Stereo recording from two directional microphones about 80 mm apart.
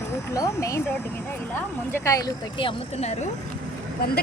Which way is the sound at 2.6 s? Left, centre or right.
Left.